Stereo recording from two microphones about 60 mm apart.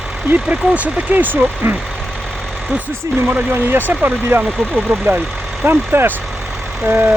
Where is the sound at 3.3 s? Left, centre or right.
Right.